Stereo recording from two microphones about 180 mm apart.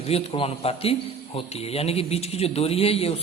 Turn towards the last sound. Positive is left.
turn(degrees=35)  # may be behind; listen again after turning